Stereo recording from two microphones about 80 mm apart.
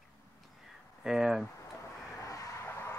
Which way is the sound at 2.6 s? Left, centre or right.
Left.